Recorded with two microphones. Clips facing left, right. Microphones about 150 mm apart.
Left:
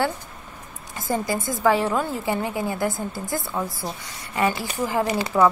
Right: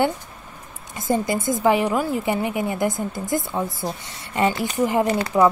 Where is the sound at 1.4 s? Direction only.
20° right (ahead or behind).